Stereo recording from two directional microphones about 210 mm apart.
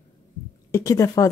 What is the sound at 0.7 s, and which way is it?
Speech, 15° left (ahead or behind).